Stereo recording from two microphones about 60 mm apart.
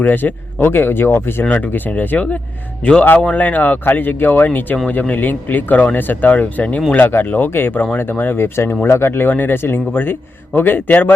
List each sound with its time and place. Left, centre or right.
0.0 s a man's voice: left
6.9 s a man's voice: left